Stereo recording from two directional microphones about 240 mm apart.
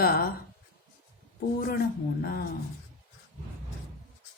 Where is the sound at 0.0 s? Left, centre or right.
Left.